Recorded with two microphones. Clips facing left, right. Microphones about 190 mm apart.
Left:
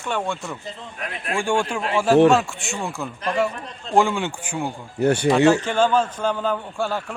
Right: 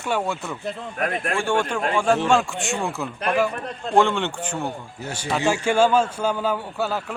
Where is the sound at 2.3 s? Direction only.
Centre (ahead or behind).